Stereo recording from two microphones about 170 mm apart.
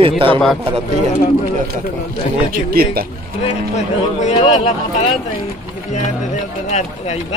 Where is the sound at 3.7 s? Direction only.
40° left (ahead or behind).